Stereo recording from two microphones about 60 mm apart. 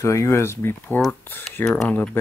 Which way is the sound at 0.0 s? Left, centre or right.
Left.